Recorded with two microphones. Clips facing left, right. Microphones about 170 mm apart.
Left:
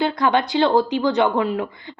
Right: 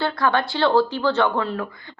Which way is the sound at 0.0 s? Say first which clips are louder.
Left 2 dB; 20° left (ahead or behind).